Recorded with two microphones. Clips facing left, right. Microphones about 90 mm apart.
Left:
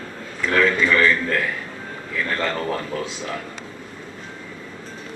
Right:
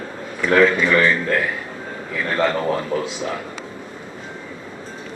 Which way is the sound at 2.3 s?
15° right (ahead or behind).